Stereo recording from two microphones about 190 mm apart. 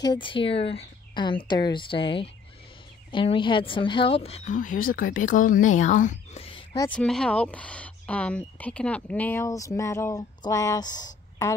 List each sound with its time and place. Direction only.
0.0 s speech: 25° left (ahead or behind)
4.6 s speech: 45° left (ahead or behind); by 6.8 s 30° left (ahead or behind)
6.9 s speech: 5° left (ahead or behind)